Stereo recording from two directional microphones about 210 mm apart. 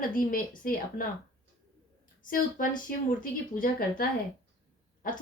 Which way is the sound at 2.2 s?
40° left (ahead or behind).